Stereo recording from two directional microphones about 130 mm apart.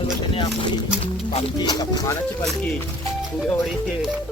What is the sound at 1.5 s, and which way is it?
Speech, 35° left (ahead or behind).